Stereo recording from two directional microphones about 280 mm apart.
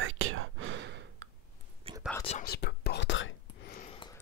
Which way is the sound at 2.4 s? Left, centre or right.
Left.